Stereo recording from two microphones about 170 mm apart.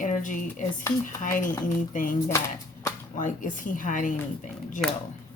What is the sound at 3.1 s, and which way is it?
Speech, 50° left (ahead or behind).